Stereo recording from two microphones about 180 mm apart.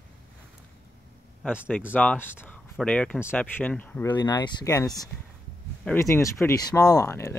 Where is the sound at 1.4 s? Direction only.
10° left (ahead or behind).